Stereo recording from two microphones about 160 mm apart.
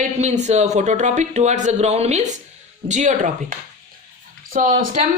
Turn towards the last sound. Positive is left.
turn(degrees=-55)  # may be behind; listen again after turning